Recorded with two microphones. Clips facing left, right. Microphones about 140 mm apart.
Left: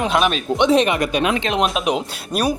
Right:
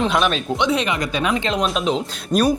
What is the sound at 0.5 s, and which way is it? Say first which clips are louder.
Speech: left 5 dB; 20° left (ahead or behind).